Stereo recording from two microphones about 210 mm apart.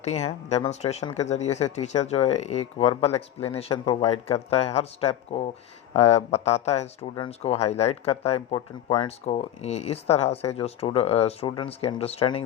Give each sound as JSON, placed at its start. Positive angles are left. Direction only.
{"t": 0.0, "sound": "speech", "side_deg": 30}